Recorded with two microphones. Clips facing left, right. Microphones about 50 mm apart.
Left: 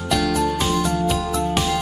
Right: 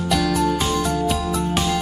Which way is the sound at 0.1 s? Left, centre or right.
Centre.